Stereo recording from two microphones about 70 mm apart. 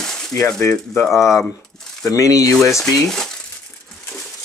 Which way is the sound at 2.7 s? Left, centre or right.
Centre.